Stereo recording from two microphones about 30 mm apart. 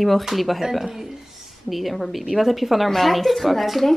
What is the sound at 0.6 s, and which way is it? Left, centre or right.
Speech, centre.